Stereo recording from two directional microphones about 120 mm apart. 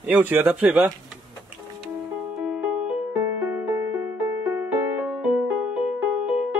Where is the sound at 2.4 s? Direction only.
10° right (ahead or behind).